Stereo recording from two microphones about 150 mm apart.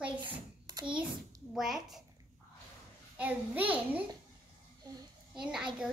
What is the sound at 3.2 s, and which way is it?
Speech, 10° right (ahead or behind).